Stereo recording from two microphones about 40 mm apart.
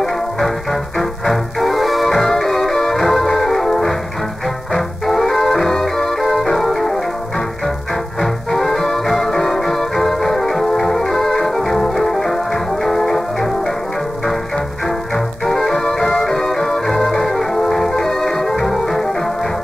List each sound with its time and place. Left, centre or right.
0.0 s music: centre
14.9 s music: centre